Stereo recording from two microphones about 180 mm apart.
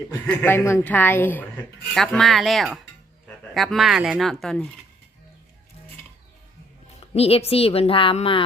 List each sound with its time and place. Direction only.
0.3 s a woman's voice: 15° left (ahead or behind)
7.1 s a woman's voice: 35° left (ahead or behind)